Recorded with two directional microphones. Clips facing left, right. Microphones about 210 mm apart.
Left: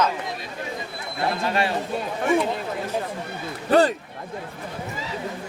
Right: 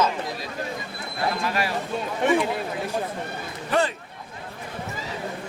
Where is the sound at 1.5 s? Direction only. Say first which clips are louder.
Left 3 dB; 25° left (ahead or behind).